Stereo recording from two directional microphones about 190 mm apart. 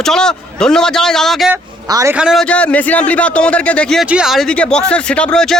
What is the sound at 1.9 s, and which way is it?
Speech, 15° right (ahead or behind).